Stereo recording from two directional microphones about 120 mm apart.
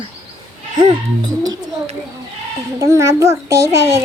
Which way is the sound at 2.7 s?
25° right (ahead or behind).